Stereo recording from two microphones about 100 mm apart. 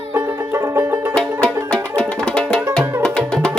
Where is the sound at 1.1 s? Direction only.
10° left (ahead or behind).